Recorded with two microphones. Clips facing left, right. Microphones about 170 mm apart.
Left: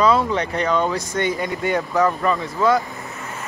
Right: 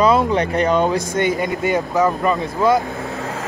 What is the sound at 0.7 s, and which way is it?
Speech, 20° right (ahead or behind).